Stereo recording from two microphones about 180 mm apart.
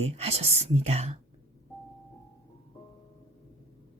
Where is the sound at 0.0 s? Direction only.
35° right (ahead or behind).